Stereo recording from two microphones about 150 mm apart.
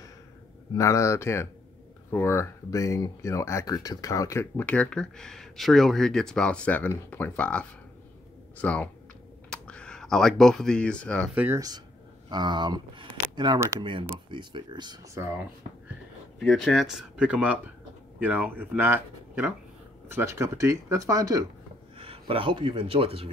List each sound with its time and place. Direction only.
0.7 s speech: 20° left (ahead or behind)
11.3 s speech: 15° right (ahead or behind)
12.3 s speech: 30° right (ahead or behind)
15.1 s speech: 15° right (ahead or behind)
16.3 s speech: 5° left (ahead or behind); by 21.5 s 25° right (ahead or behind)
21.9 s speech: 40° right (ahead or behind)